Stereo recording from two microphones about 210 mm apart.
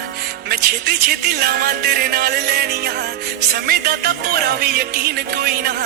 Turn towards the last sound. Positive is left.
turn(degrees=-45)  # may be behind; listen again after turning